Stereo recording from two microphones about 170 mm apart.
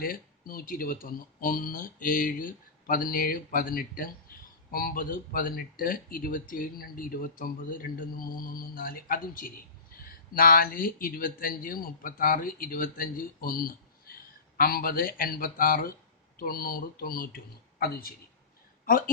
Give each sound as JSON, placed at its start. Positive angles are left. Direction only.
{"t": 0.0, "sound": "speech", "side_deg": 60}
{"t": 18.9, "sound": "a woman's voice", "side_deg": 55}